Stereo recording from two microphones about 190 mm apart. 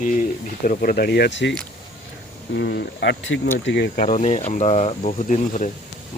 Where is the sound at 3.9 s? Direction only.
40° left (ahead or behind).